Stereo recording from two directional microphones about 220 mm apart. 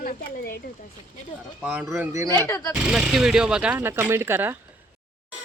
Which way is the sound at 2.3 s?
15° left (ahead or behind).